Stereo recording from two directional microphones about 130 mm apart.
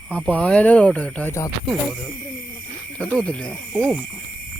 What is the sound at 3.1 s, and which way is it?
Speech, 10° left (ahead or behind).